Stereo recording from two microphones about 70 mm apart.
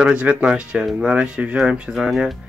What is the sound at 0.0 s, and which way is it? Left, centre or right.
Speech, centre.